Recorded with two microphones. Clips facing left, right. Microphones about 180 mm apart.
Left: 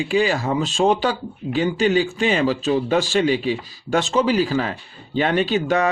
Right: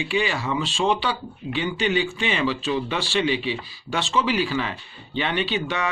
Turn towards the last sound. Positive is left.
turn(degrees=45)  # may be behind; listen again after turning